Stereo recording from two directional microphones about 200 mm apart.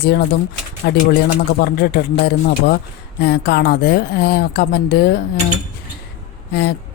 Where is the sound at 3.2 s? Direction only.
55° left (ahead or behind).